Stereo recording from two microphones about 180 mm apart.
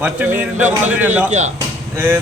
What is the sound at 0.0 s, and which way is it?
A man's voice, 10° right (ahead or behind).